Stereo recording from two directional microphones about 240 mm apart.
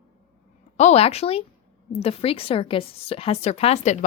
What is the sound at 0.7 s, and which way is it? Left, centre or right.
Speech, left.